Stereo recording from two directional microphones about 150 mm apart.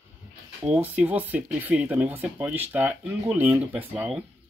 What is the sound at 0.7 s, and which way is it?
Speech, 10° right (ahead or behind).